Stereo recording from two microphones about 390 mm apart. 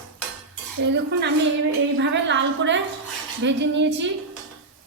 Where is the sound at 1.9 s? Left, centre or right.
Right.